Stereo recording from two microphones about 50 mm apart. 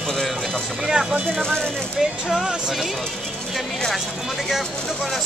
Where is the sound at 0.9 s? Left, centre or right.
Centre.